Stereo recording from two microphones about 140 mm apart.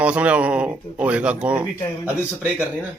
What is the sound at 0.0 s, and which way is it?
A man's voice, 10° right (ahead or behind).